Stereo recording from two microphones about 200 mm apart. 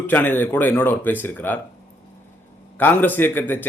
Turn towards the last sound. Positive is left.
turn(degrees=10)  # may be behind; listen again after turning